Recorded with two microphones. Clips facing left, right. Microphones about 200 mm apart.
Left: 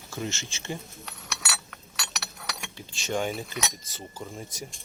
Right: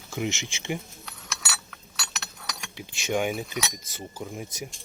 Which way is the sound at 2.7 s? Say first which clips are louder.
Right 3 dB; 10° right (ahead or behind).